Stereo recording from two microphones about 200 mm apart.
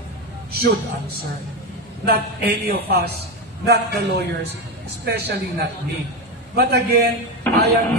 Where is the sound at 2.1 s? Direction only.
50° right (ahead or behind).